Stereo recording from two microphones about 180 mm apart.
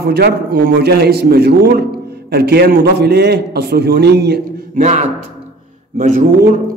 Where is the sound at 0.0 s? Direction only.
60° right (ahead or behind).